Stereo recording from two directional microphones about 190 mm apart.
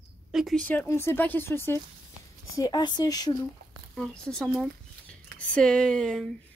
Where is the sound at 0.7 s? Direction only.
10° left (ahead or behind).